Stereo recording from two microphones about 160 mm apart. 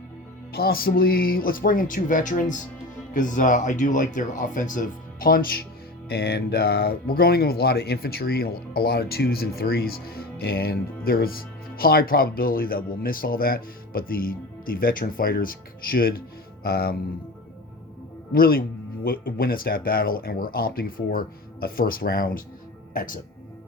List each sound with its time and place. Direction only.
0.5 s speech: 70° left (ahead or behind)
6.1 s speech: 80° left
18.3 s speech: 65° left (ahead or behind)